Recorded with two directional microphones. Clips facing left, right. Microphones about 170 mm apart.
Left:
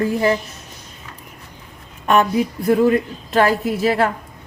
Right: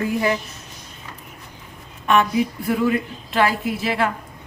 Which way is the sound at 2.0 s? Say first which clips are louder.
Left 2 dB; 40° left (ahead or behind).